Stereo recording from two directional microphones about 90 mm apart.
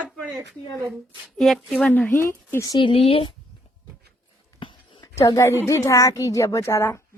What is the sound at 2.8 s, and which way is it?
Speech, 80° left.